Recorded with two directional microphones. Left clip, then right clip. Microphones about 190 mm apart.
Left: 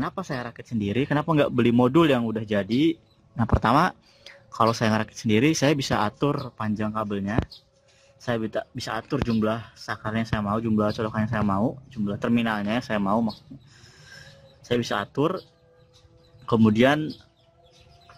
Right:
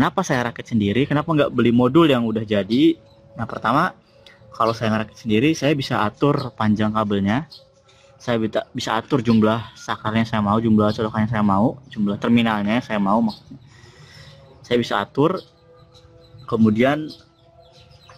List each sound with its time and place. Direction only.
0.0 s speech: 10° right (ahead or behind)
1.2 s speech: 20° left (ahead or behind)
6.2 s speech: centre (ahead or behind)
14.1 s music: 5° left (ahead or behind)
16.4 s speech: 20° left (ahead or behind)